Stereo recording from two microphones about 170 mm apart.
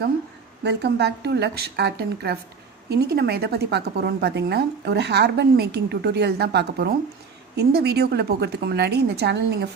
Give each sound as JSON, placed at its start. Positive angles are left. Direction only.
{"t": 0.6, "sound": "a woman's voice", "side_deg": -80}